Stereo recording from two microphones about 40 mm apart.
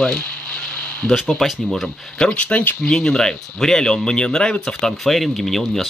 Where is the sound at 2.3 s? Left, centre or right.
Left.